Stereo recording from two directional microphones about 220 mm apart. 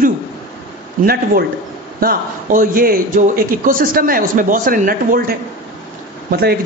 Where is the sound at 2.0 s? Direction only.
40° right (ahead or behind).